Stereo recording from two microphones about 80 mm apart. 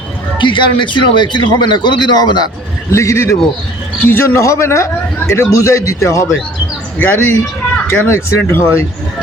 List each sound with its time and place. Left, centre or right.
0.3 s a man's voice: left
2.9 s a man's voice: left
4.0 s a man's voice: left
7.0 s a man's voice: left